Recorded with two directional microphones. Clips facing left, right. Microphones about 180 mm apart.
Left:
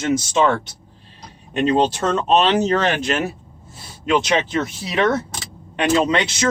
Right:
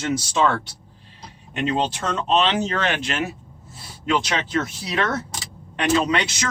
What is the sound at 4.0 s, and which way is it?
Speech, 20° left (ahead or behind).